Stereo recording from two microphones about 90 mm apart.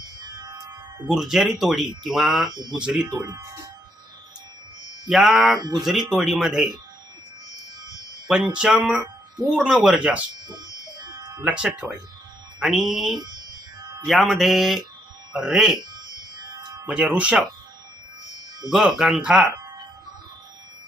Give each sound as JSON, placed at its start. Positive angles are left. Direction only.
{"t": 1.0, "sound": "speech", "side_deg": -5}
{"t": 2.5, "sound": "speech", "side_deg": -50}
{"t": 2.7, "sound": "speech", "side_deg": -10}
{"t": 3.2, "sound": "speech", "side_deg": -35}
{"t": 5.0, "sound": "speech", "side_deg": -5}
{"t": 8.5, "sound": "speech", "side_deg": -10}
{"t": 11.4, "sound": "speech", "side_deg": -10}
{"t": 13.1, "sound": "speech", "side_deg": -50}
{"t": 14.1, "sound": "speech", "side_deg": 0}
{"t": 16.0, "sound": "music", "side_deg": -50}
{"t": 16.8, "sound": "speech", "side_deg": -15}
{"t": 18.7, "sound": "speech", "side_deg": -5}